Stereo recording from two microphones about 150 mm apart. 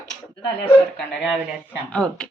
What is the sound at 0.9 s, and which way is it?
Speech, centre (ahead or behind).